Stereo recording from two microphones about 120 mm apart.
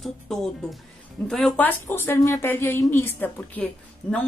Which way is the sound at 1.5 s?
15° left (ahead or behind).